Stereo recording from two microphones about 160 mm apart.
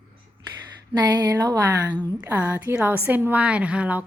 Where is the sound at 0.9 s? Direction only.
25° right (ahead or behind).